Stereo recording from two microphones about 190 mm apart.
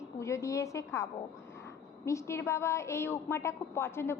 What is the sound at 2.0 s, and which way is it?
A woman's voice, 15° left (ahead or behind).